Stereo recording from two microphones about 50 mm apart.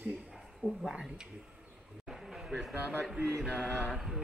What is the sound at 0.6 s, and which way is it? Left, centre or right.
Speech, left.